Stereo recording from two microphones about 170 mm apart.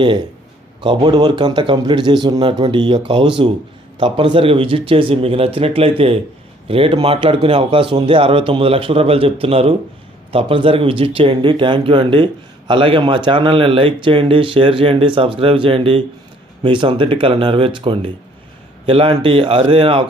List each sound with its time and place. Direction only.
0.8 s a man's voice: 25° right (ahead or behind)